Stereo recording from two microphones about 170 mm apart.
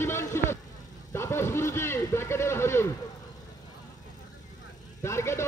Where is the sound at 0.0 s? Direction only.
15° left (ahead or behind).